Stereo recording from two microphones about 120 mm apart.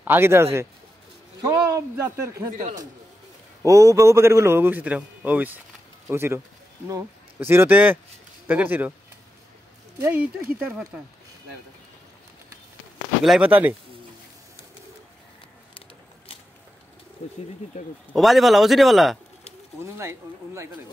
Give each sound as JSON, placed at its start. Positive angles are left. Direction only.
{"t": 0.0, "sound": "a man's voice", "side_deg": -20}
{"t": 2.5, "sound": "a man's voice", "side_deg": -90}
{"t": 3.6, "sound": "a man's voice", "side_deg": -25}
{"t": 9.9, "sound": "speech", "side_deg": -15}
{"t": 13.2, "sound": "a man's voice", "side_deg": 0}
{"t": 13.5, "sound": "speech", "side_deg": -15}
{"t": 18.1, "sound": "a man's voice", "side_deg": 0}
{"t": 19.8, "sound": "a man's voice", "side_deg": -25}